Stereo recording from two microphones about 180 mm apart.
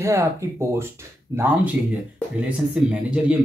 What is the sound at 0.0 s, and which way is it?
Speech, 15° right (ahead or behind).